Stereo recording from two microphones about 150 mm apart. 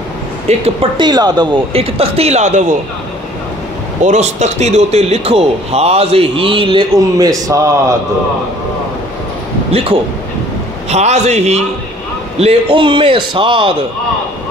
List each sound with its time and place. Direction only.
0.5 s a man's voice: 40° right (ahead or behind)
1.7 s a man's voice: 40° right (ahead or behind)
4.0 s a man's voice: 50° right (ahead or behind); by 7.6 s 25° right (ahead or behind)
9.7 s speech: 40° right (ahead or behind)
10.9 s a man's voice: 50° right (ahead or behind)